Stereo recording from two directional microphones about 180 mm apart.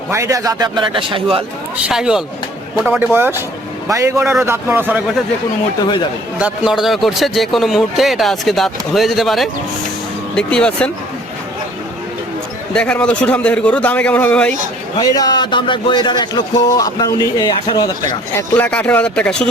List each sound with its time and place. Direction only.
0.1 s a man's voice: 15° right (ahead or behind)
1.8 s a man's voice: 5° right (ahead or behind)
5.8 s speech: 25° left (ahead or behind)
6.4 s a man's voice: 5° right (ahead or behind)
12.7 s a man's voice: 5° left (ahead or behind)
14.9 s speech: 20° left (ahead or behind)
18.3 s a man's voice: 10° left (ahead or behind)